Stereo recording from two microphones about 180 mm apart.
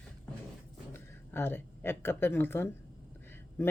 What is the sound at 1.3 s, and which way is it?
A man's voice, 10° left (ahead or behind).